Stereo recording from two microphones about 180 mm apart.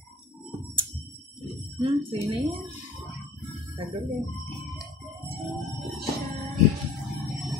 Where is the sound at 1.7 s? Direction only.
30° right (ahead or behind).